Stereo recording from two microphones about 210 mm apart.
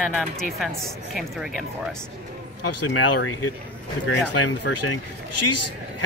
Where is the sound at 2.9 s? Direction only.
90° left.